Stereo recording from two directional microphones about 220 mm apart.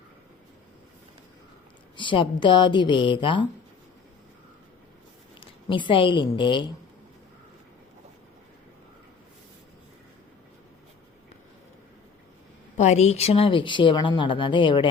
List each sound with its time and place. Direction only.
2.0 s speech: 20° left (ahead or behind)
5.4 s a woman's voice: 20° left (ahead or behind)
12.7 s speech: 30° left (ahead or behind)